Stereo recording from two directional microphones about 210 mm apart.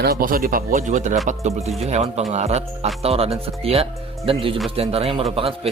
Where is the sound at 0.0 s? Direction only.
45° right (ahead or behind).